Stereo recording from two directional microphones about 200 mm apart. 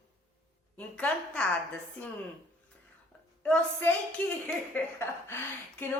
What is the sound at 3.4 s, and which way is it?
A woman's voice, 5° left (ahead or behind).